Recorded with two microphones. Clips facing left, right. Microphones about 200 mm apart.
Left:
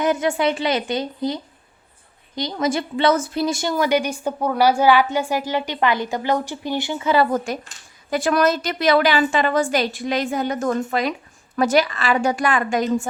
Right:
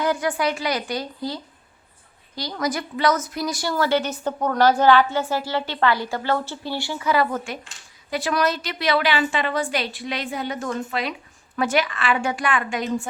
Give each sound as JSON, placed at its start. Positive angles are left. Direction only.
{"t": 0.0, "sound": "a woman's voice", "side_deg": 20}
{"t": 7.3, "sound": "a woman's voice", "side_deg": 40}